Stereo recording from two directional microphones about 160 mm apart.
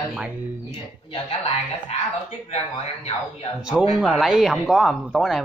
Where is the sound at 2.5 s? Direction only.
40° left (ahead or behind).